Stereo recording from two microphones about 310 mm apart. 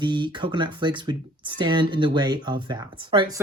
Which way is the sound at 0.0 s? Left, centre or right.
Centre.